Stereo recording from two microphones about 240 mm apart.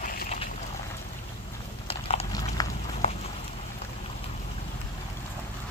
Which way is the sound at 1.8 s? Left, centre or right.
Left.